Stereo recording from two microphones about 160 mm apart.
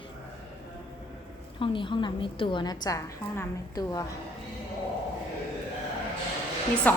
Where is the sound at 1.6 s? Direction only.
30° left (ahead or behind).